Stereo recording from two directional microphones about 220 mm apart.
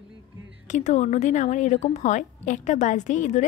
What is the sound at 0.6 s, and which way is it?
A woman's voice, 30° left (ahead or behind).